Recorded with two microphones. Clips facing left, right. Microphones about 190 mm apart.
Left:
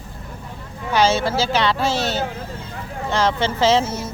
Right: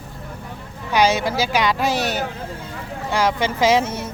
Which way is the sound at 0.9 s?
15° right (ahead or behind).